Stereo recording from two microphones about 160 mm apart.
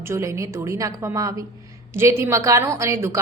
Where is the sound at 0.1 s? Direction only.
20° right (ahead or behind).